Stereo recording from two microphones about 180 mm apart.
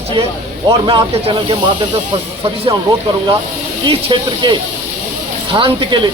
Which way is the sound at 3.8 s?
25° right (ahead or behind).